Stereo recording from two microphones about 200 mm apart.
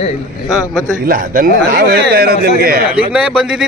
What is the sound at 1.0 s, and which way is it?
Speech, 45° right (ahead or behind).